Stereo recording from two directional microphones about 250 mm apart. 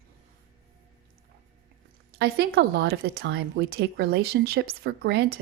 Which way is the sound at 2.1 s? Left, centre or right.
Right.